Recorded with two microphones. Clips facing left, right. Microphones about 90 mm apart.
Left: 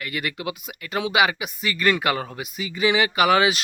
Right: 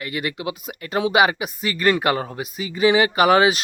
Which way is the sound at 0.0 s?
25° right (ahead or behind).